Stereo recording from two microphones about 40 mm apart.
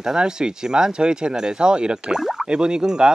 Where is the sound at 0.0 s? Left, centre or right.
Centre.